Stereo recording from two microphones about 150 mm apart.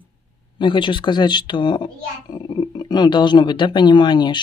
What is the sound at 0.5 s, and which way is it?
A child's voice, 30° left (ahead or behind).